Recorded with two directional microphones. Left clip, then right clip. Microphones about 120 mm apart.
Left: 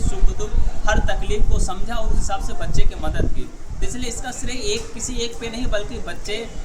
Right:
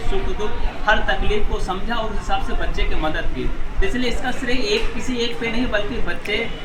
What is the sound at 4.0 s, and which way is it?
Speech, 25° left (ahead or behind).